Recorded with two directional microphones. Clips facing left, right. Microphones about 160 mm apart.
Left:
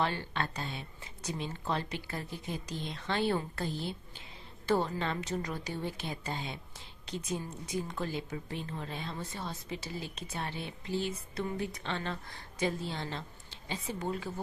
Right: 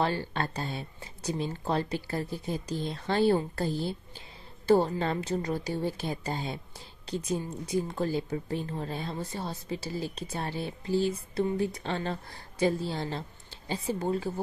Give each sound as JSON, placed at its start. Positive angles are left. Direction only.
{"t": 0.0, "sound": "speech", "side_deg": -35}